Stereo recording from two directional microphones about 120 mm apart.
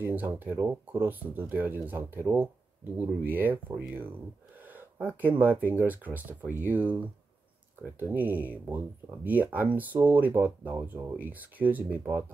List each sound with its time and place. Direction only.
0.0 s speech: 15° right (ahead or behind)
4.6 s a sound: 15° right (ahead or behind)
5.0 s speech: 15° right (ahead or behind)